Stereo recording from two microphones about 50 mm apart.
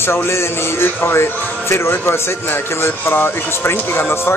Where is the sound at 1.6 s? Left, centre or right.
Left.